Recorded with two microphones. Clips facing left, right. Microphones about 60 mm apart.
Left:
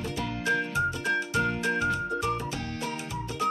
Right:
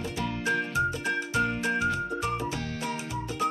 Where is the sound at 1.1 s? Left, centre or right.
Centre.